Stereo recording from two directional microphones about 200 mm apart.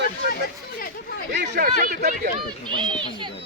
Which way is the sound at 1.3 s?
55° right (ahead or behind).